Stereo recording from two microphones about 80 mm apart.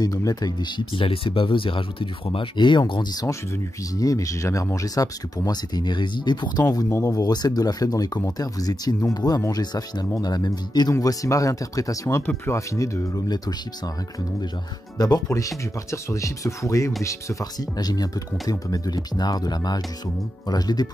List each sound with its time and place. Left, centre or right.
0.0 s speech: left
0.7 s speech: left
3.9 s speech: left
11.0 s speech: left
15.0 s speech: left
15.2 s speech: left
17.6 s speech: left